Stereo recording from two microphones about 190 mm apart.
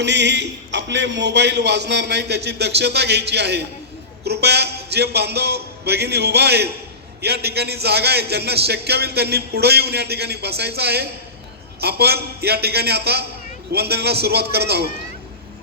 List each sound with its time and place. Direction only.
0.0 s a man's voice: 65° right (ahead or behind)